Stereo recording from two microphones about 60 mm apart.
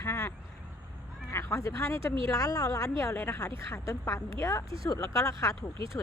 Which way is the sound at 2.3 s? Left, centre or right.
Left.